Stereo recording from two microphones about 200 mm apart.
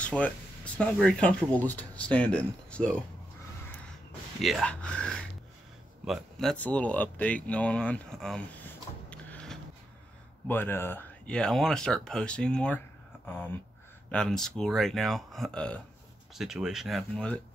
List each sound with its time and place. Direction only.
0.0 s speech: 5° left (ahead or behind)
4.4 s speech: centre (ahead or behind)
14.1 s speech: 5° left (ahead or behind)